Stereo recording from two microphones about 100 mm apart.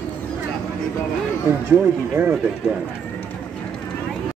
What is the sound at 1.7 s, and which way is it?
Speech, 20° right (ahead or behind).